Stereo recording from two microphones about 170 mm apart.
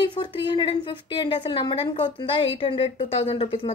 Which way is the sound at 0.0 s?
25° left (ahead or behind).